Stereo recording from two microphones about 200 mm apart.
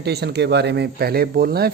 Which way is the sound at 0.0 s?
55° right (ahead or behind).